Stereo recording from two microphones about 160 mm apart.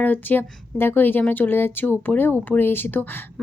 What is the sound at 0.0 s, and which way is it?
A woman's voice, 10° left (ahead or behind).